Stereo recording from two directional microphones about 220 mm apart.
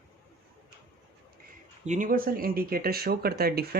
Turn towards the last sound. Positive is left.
turn(degrees=-45)  # may be behind; listen again after turning